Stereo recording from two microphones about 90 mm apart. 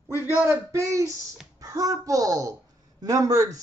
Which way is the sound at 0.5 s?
35° right (ahead or behind).